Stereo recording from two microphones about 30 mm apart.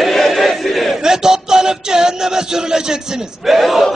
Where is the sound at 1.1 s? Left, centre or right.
Centre.